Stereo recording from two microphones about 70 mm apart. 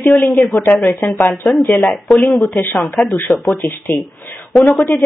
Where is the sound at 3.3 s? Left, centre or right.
Left.